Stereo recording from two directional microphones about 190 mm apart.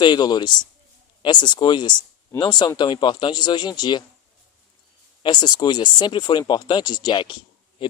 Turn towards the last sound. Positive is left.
turn(degrees=25)  # may be behind; listen again after turning